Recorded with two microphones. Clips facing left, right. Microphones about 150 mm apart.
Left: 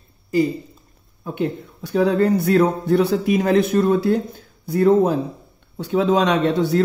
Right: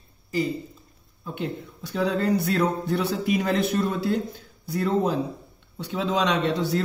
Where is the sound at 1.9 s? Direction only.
50° left (ahead or behind).